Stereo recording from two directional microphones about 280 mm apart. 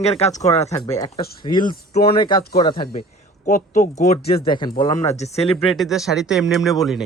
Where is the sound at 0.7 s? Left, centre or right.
Centre.